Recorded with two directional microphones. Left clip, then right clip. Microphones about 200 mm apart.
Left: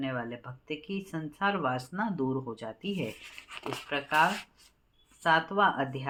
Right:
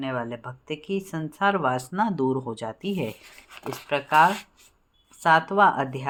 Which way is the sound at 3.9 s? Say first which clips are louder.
Right 7 dB; 45° right (ahead or behind).